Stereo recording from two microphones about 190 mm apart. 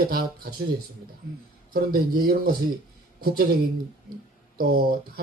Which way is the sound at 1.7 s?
50° right (ahead or behind).